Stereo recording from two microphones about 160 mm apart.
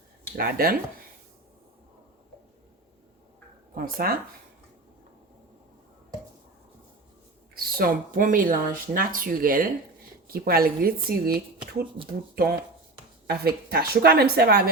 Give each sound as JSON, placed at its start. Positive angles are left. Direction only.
{"t": 0.3, "sound": "speech", "side_deg": -65}
{"t": 3.8, "sound": "speech", "side_deg": -65}
{"t": 7.5, "sound": "speech", "side_deg": -70}
{"t": 13.2, "sound": "speech", "side_deg": -75}